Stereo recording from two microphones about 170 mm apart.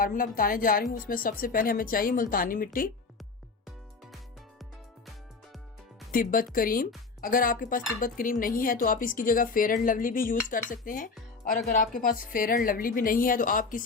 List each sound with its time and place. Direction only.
0.0 s a woman's voice: 55° left (ahead or behind)
6.1 s a woman's voice: 55° left (ahead or behind)